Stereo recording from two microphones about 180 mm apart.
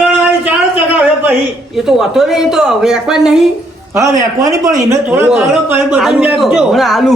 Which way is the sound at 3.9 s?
15° right (ahead or behind).